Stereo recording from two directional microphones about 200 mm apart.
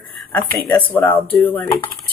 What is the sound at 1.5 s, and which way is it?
Dishes, 25° left (ahead or behind).